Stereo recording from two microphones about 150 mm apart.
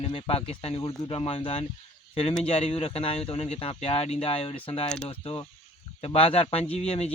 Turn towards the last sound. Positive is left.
turn(degrees=45)  # may be behind; listen again after turning